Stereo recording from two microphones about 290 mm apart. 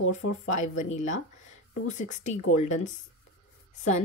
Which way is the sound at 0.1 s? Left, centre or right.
Left.